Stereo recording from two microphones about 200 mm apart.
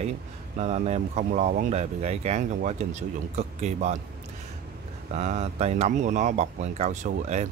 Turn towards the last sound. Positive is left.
turn(degrees=-35)  # may be behind; listen again after turning